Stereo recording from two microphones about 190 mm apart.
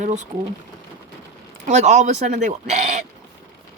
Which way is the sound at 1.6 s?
40° right (ahead or behind).